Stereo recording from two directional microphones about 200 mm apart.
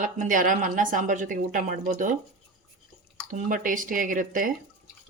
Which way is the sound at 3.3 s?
40° right (ahead or behind).